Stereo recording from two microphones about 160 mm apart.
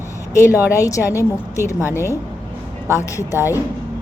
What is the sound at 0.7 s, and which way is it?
A woman's voice, 20° left (ahead or behind).